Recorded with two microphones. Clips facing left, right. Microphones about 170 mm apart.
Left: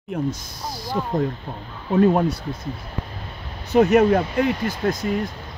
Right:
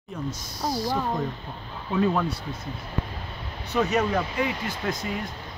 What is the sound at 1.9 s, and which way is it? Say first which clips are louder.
Speech: left 7 dB; 45° left (ahead or behind).